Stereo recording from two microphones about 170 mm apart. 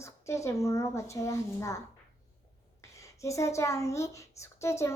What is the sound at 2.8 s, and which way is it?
Speech, 20° left (ahead or behind).